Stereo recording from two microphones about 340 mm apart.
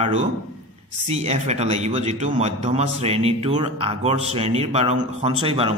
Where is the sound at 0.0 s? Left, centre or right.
Centre.